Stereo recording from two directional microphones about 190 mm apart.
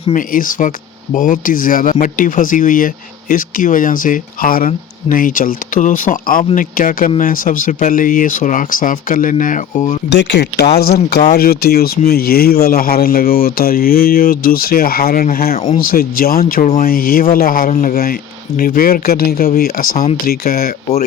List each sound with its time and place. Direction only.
0.1 s speech: 45° left (ahead or behind)
10.2 s speech: 65° left (ahead or behind); by 15.5 s 50° left (ahead or behind)
15.5 s speech: 35° left (ahead or behind)
15.9 s speech: 50° left (ahead or behind)